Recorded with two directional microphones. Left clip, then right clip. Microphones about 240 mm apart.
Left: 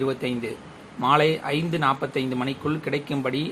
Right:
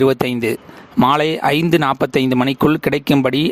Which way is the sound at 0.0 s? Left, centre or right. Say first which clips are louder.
Right 11 dB; right.